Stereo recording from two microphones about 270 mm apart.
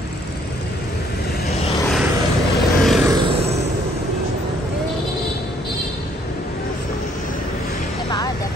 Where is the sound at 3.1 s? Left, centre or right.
Centre.